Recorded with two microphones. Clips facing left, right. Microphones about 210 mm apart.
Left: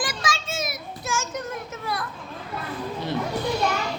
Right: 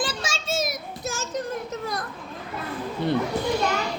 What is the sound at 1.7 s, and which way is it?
Children playing, 45° right (ahead or behind).